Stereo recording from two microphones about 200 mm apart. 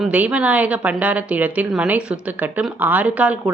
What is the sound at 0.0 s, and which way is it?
A woman's voice, 5° right (ahead or behind).